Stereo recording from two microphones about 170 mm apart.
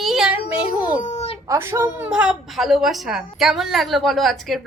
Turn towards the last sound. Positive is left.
turn(degrees=0)  # may be behind; listen again after turning